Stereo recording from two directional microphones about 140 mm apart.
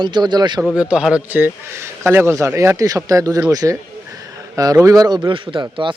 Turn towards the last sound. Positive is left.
turn(degrees=-35)  # may be behind; listen again after turning